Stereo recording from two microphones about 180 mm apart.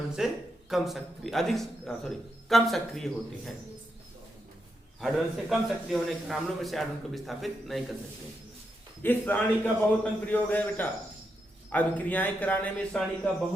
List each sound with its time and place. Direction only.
0.2 s a man's voice: 5° right (ahead or behind)
4.9 s a man's voice: centre (ahead or behind)
9.0 s a man's voice: 10° left (ahead or behind)